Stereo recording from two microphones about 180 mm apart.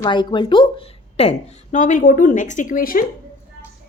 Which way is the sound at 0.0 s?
25° left (ahead or behind).